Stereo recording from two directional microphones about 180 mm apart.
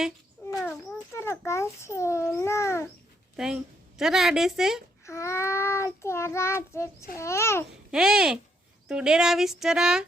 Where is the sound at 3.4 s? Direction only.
5° right (ahead or behind).